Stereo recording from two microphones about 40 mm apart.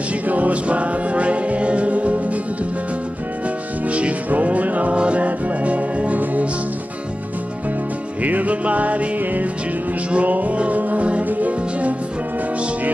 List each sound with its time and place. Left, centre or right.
0.3 s music: right
3.9 s music: right
8.2 s music: right